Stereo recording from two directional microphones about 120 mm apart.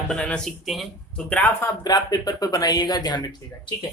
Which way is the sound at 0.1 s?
10° left (ahead or behind).